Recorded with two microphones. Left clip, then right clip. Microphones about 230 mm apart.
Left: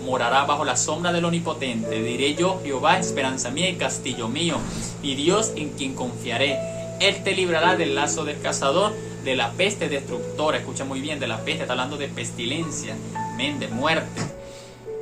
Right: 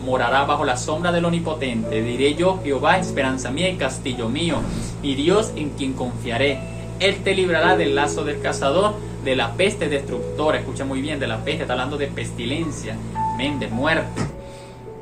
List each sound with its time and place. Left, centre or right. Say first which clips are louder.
0.1 s a man's voice: right 2 dB; centre
13.3 s a man's voice: right 2 dB; centre